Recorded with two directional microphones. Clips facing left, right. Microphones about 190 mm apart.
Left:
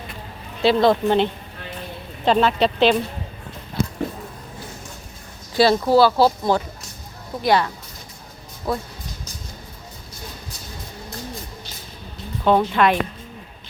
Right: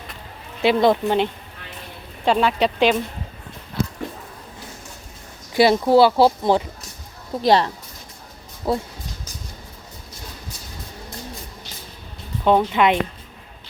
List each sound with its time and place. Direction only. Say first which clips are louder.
0.6 s speech: even; 15° right (ahead or behind)
5.5 s speech: right 1 dB; 20° right (ahead or behind)
12.5 s speech: even; 15° right (ahead or behind)